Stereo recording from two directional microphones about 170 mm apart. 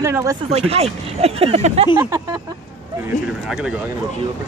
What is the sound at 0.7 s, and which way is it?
Speech, 35° right (ahead or behind).